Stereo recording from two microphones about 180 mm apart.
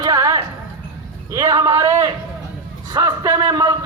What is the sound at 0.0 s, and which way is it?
Music, 20° right (ahead or behind).